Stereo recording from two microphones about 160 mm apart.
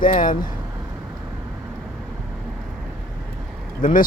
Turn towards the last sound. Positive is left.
turn(degrees=55)  # may be behind; listen again after turning